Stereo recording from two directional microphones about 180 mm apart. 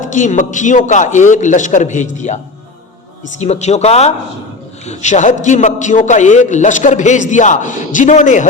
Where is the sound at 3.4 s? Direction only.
35° left (ahead or behind).